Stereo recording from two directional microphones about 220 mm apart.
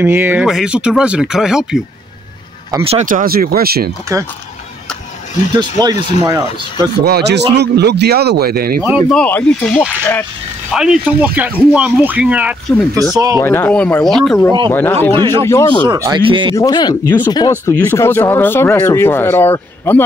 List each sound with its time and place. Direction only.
0.0 s speech: 10° right (ahead or behind)
2.7 s speech: 25° right (ahead or behind); by 3.9 s 45° right (ahead or behind)
5.8 s speech: 15° right (ahead or behind)
7.1 s speech: 50° right (ahead or behind)
9.1 s speech: 5° left (ahead or behind)
13.1 s speech: 15° right (ahead or behind)
13.4 s speech: 10° left (ahead or behind)
15.8 s speech: 20° right (ahead or behind)
16.5 s speech: 20° left (ahead or behind)